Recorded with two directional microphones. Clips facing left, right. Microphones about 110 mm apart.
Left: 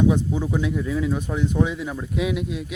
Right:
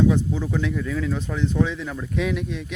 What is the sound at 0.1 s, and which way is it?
Speech, 15° left (ahead or behind).